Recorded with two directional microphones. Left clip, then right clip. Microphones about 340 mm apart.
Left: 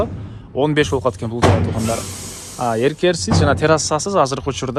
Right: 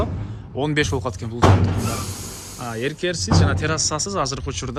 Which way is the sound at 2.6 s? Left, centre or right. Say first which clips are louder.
Left 9 dB; centre.